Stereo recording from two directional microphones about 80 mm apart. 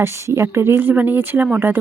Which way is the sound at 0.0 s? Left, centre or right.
Right.